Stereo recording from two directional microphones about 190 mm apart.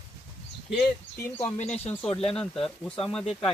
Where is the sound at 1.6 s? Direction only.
35° left (ahead or behind).